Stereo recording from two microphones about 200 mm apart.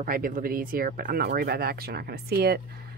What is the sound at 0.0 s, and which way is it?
Speech, 45° right (ahead or behind).